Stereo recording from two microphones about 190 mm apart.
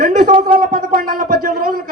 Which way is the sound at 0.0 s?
40° right (ahead or behind).